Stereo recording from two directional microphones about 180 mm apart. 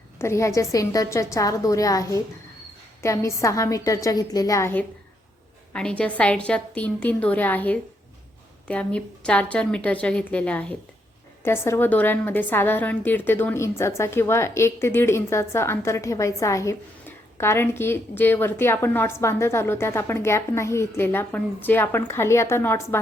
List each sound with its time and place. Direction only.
0.2 s a woman's voice: 15° left (ahead or behind)